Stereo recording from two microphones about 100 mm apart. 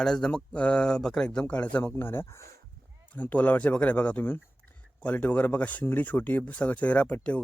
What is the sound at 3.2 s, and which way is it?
Speech, 15° left (ahead or behind).